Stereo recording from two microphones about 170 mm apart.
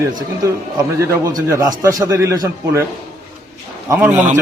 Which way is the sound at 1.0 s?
20° right (ahead or behind).